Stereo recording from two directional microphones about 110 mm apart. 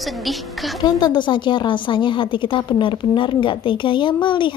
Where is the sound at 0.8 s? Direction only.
45° left (ahead or behind).